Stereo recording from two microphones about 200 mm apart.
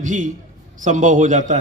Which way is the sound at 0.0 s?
40° right (ahead or behind).